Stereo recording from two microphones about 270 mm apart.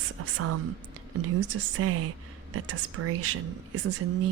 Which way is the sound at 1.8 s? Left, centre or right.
Right.